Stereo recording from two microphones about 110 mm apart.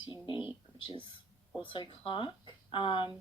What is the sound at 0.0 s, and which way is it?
A woman's voice, 45° left (ahead or behind).